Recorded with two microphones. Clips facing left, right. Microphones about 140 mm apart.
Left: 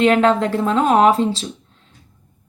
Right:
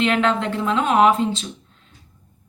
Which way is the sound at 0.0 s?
40° left (ahead or behind).